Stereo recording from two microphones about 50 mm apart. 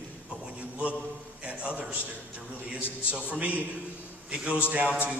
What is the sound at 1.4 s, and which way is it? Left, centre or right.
Speech, right.